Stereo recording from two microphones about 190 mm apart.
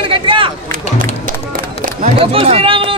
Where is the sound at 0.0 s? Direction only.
25° right (ahead or behind).